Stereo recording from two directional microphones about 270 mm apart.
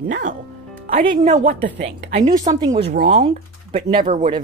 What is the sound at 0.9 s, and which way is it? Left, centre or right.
A woman's voice, right.